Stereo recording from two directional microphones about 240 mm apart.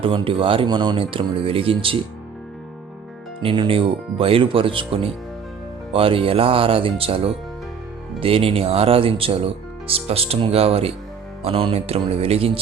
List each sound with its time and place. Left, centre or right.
0.0 s speech: right
3.4 s speech: right